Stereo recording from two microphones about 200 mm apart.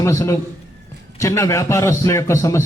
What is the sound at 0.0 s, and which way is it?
A man's voice, 15° left (ahead or behind).